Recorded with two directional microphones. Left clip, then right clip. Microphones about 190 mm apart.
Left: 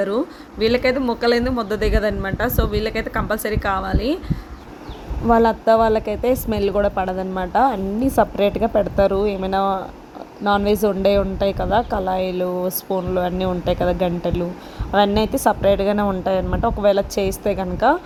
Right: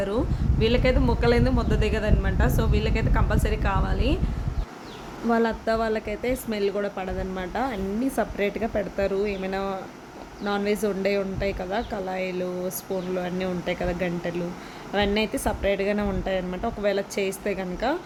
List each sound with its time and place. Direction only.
0.6 s a woman's voice: 30° left (ahead or behind)
5.3 s a woman's voice: 25° left (ahead or behind)